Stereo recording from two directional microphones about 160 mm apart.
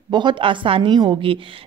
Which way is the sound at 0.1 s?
30° right (ahead or behind).